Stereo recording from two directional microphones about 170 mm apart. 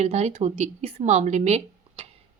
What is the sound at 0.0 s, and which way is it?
Speech, 40° right (ahead or behind).